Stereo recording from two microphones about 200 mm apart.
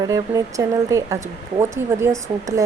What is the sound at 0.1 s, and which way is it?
Speech, 15° right (ahead or behind).